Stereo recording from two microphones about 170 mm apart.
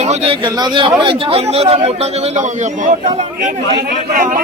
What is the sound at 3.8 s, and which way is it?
Speech, 60° right (ahead or behind).